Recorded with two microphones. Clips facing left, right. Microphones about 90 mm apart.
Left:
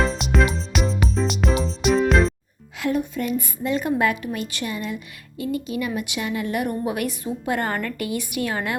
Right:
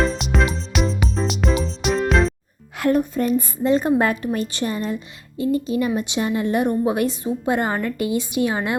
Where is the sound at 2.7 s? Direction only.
45° right (ahead or behind).